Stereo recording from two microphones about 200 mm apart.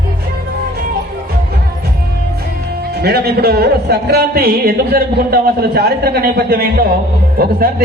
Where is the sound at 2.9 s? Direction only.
55° right (ahead or behind).